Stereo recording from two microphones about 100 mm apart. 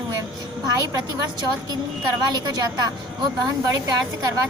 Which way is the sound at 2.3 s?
40° right (ahead or behind).